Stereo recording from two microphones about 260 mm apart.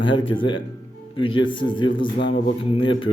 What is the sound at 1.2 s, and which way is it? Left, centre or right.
Speech, centre.